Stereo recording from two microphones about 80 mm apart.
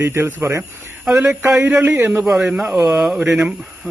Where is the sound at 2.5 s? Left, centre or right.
Centre.